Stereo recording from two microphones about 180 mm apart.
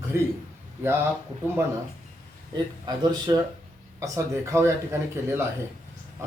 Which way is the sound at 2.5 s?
25° right (ahead or behind).